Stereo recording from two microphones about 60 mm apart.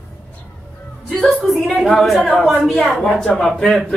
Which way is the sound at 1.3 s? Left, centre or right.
Centre.